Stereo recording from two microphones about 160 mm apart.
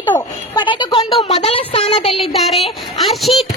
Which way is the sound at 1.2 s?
40° left (ahead or behind).